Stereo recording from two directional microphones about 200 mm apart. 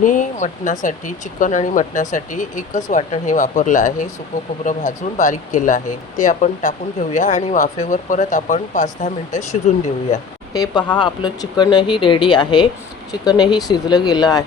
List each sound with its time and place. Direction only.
0.0 s speech: 40° left (ahead or behind)
10.5 s speech: 20° left (ahead or behind)